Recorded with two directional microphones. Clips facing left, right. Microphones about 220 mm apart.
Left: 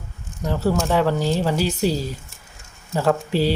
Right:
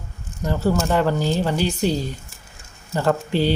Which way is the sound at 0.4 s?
Centre (ahead or behind).